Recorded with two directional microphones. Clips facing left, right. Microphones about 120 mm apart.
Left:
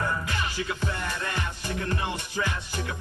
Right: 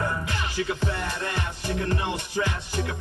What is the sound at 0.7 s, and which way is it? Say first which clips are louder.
Music: right 3 dB; 25° right (ahead or behind).